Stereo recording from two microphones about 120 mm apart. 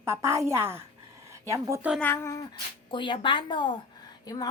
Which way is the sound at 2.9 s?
40° left (ahead or behind).